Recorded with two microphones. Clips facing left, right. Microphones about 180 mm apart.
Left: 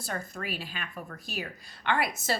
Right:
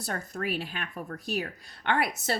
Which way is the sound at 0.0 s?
55° right (ahead or behind).